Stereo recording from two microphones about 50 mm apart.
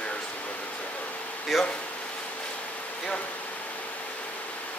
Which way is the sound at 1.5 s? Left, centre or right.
Centre.